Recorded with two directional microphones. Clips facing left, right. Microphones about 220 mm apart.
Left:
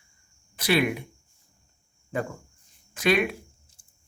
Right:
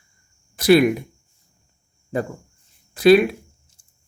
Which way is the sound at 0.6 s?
45° right (ahead or behind).